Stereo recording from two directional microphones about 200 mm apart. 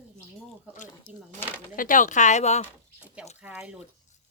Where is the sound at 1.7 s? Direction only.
45° left (ahead or behind).